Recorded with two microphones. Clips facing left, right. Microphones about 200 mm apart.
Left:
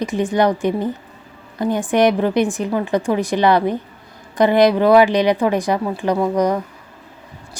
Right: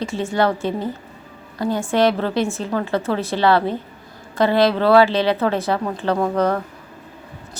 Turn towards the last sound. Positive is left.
turn(degrees=15)  # may be behind; listen again after turning